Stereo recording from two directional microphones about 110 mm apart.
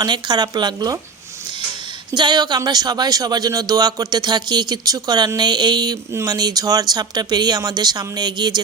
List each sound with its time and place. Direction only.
0.0 s speech: 40° right (ahead or behind)
2.1 s speech: 40° right (ahead or behind)